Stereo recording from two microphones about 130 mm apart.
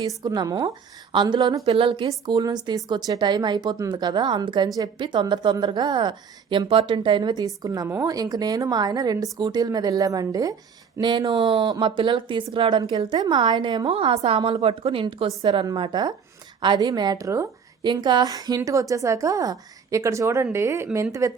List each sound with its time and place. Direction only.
0.2 s a woman's voice: 25° right (ahead or behind); by 2.0 s 45° right (ahead or behind)
2.0 s a woman's voice: 30° right (ahead or behind)
13.9 s a woman's voice: 45° right (ahead or behind)
15.4 s a woman's voice: 30° right (ahead or behind)